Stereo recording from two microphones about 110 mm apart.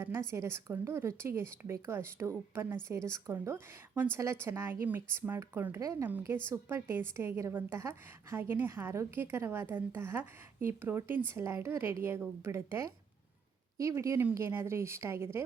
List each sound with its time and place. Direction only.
0.0 s a woman's voice: 25° right (ahead or behind)